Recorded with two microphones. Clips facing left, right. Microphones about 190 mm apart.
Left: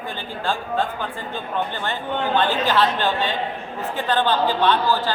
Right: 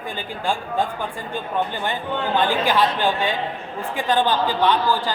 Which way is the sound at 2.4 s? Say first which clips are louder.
Right 1 dB; 10° right (ahead or behind).